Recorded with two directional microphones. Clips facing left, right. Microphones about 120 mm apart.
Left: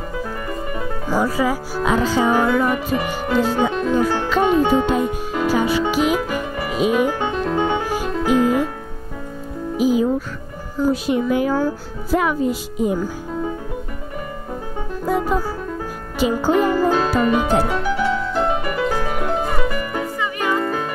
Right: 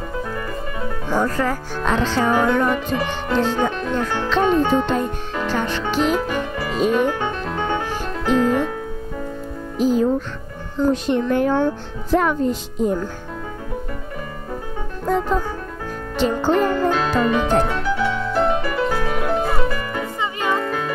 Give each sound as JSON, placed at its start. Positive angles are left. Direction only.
{"t": 1.0, "sound": "speech", "side_deg": 10}
{"t": 7.2, "sound": "music", "side_deg": 15}
{"t": 9.8, "sound": "music", "side_deg": 10}
{"t": 10.8, "sound": "speech", "side_deg": 5}
{"t": 15.0, "sound": "music", "side_deg": 10}
{"t": 16.2, "sound": "speech", "side_deg": 10}
{"t": 20.2, "sound": "music", "side_deg": -25}